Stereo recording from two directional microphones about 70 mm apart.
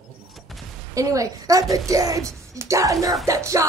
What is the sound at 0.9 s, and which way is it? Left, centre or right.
A woman's voice, right.